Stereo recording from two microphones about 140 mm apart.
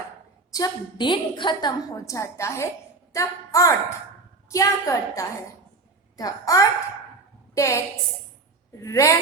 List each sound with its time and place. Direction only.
0.5 s a woman's voice: 30° left (ahead or behind)
8.8 s a woman's voice: 20° left (ahead or behind)